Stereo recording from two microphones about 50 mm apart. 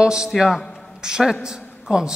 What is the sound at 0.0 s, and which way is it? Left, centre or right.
Speech, centre.